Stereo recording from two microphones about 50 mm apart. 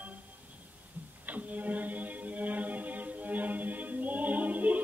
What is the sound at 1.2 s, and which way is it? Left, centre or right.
Music, right.